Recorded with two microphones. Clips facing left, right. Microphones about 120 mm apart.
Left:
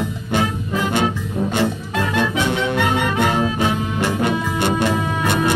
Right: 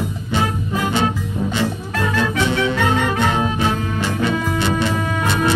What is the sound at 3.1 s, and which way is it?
Music, 55° left (ahead or behind).